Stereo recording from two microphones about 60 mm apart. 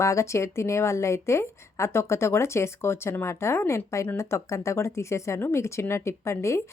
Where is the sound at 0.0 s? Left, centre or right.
Left.